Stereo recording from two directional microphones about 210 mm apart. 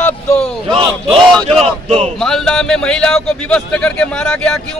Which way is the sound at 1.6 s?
30° right (ahead or behind).